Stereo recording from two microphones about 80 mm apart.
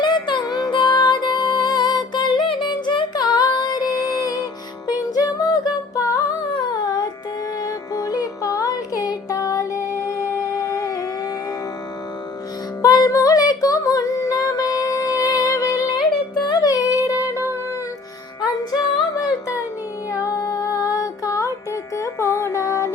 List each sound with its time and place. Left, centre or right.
0.0 s music: left
0.7 s music: left
3.2 s music: left
12.8 s music: left
18.7 s music: left